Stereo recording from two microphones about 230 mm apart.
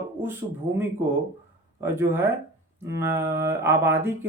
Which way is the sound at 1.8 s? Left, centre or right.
Centre.